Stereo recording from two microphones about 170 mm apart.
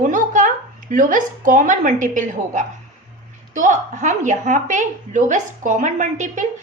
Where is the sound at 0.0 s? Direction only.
50° right (ahead or behind).